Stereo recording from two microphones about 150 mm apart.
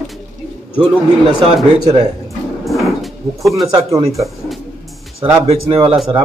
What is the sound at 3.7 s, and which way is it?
Speech, 20° right (ahead or behind).